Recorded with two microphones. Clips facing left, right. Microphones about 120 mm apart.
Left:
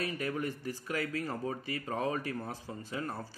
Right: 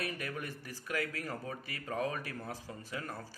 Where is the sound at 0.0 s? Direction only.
25° left (ahead or behind).